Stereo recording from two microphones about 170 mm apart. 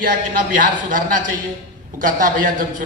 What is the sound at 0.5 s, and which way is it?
A man's voice, 50° right (ahead or behind).